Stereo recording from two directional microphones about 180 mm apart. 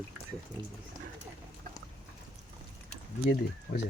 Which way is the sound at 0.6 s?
25° right (ahead or behind).